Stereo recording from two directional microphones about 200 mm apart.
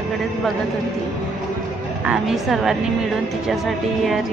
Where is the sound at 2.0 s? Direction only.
Centre (ahead or behind).